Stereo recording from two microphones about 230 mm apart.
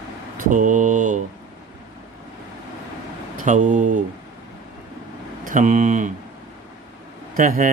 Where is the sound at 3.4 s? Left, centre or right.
Right.